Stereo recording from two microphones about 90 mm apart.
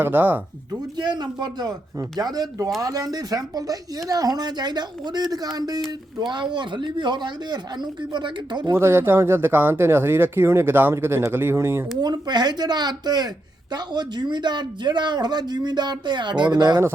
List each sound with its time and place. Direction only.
0.0 s speech: 20° right (ahead or behind)
0.7 s speech: 55° right (ahead or behind)
8.7 s speech: 25° right (ahead or behind)
11.9 s speech: 50° right (ahead or behind)